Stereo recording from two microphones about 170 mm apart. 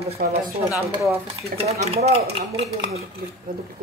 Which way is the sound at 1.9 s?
40° right (ahead or behind).